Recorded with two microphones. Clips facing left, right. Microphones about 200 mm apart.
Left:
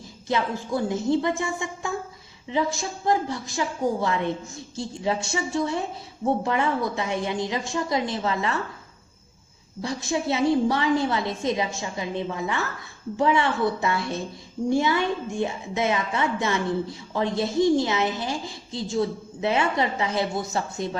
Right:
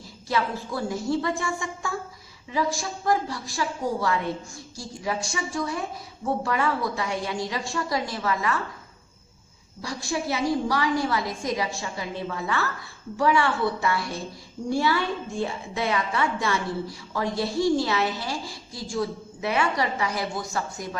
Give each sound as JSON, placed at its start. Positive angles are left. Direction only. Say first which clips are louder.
{"t": 0.3, "sound": "a woman's voice", "louder": "left 2 dB", "side_deg": 20}
{"t": 9.8, "sound": "a woman's voice", "louder": "left 3 dB", "side_deg": 20}